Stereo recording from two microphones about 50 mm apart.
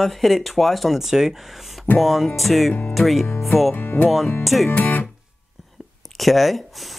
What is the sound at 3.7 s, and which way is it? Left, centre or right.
Music, left.